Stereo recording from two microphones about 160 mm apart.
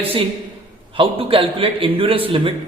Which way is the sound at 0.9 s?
35° right (ahead or behind).